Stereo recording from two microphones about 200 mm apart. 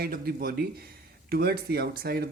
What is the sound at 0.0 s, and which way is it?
Speech, 50° right (ahead or behind).